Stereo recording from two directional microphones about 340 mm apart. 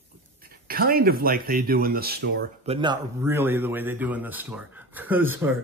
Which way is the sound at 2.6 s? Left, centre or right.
Centre.